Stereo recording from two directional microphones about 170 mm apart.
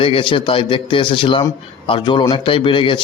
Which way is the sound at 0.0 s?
30° left (ahead or behind).